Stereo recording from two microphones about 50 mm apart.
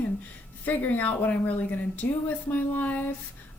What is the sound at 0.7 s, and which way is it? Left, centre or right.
A woman's voice, left.